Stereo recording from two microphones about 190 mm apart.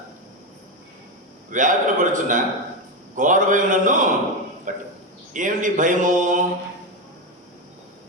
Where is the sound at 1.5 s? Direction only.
40° right (ahead or behind).